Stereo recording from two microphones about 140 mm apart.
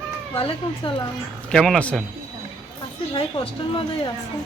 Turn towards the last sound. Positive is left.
turn(degrees=40)  # may be behind; listen again after turning